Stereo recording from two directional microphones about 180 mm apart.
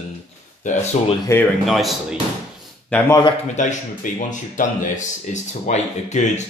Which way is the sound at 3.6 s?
45° left (ahead or behind).